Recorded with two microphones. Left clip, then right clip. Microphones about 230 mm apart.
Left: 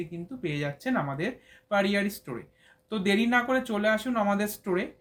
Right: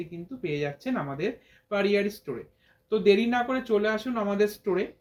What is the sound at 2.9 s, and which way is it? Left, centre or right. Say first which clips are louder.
Speech: right 4 dB; left.